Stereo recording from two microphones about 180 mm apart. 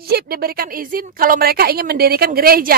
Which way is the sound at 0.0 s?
55° right (ahead or behind).